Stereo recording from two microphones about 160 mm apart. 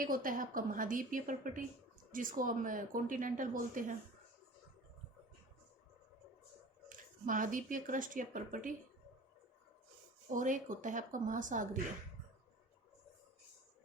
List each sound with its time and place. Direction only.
0.0 s speech: 60° right (ahead or behind)
6.8 s speech: 55° right (ahead or behind)
10.3 s a woman's voice: 55° right (ahead or behind)